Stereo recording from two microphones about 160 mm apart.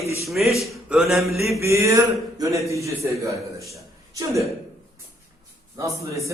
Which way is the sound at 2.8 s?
20° right (ahead or behind).